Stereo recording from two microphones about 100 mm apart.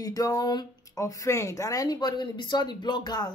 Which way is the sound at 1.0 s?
35° left (ahead or behind).